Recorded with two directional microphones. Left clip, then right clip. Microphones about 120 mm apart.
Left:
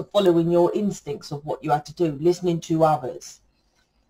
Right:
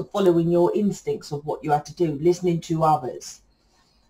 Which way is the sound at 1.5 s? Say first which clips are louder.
Even; centre (ahead or behind).